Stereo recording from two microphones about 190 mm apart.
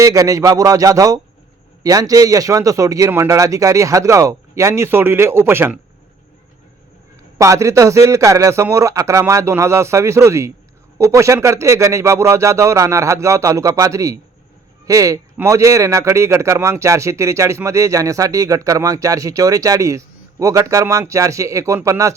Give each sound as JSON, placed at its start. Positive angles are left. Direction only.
{"t": 0.0, "sound": "a man's voice", "side_deg": -20}
{"t": 7.3, "sound": "a man's voice", "side_deg": -15}